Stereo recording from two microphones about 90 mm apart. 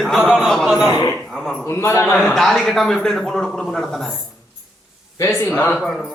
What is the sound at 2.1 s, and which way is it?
A man's voice, 5° left (ahead or behind).